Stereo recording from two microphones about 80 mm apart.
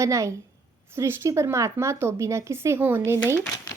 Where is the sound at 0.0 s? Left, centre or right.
Right.